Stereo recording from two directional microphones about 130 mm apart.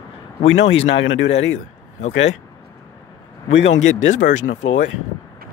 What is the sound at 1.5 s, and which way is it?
Speech, 60° left (ahead or behind).